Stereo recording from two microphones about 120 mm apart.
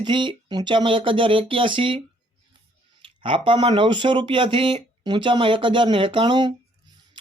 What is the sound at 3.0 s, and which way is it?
Speech, 45° right (ahead or behind).